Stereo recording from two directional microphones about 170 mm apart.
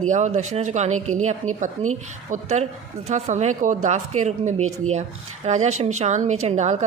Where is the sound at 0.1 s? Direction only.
45° right (ahead or behind).